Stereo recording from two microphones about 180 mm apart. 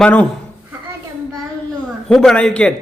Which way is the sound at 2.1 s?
5° left (ahead or behind).